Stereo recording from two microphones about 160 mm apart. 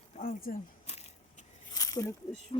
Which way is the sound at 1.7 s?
20° left (ahead or behind).